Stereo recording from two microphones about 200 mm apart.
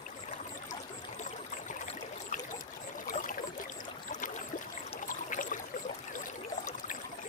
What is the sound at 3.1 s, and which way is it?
Trickle, 40° left (ahead or behind).